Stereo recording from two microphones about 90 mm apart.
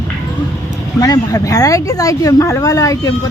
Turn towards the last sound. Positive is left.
turn(degrees=40)  # may be behind; listen again after turning